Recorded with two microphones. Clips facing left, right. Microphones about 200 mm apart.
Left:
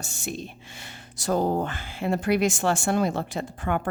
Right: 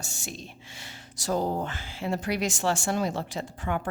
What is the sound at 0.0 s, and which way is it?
Speech, 60° left (ahead or behind).